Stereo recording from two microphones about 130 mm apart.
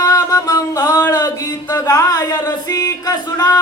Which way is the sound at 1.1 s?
30° left (ahead or behind).